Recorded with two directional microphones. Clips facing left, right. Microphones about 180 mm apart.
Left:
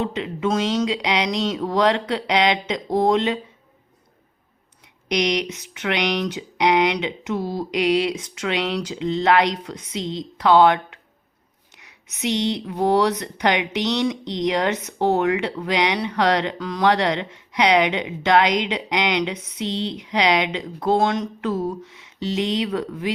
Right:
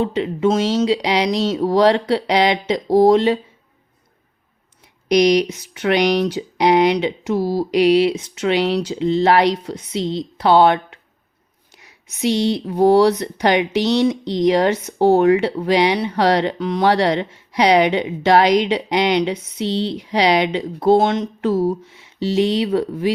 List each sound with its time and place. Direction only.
0.0 s speech: 30° right (ahead or behind)
5.0 s speech: 35° right (ahead or behind)